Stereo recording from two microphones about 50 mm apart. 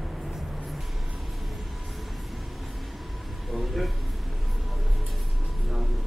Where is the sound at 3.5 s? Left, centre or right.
Centre.